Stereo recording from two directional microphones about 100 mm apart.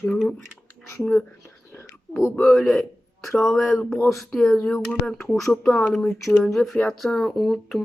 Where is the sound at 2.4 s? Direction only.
Centre (ahead or behind).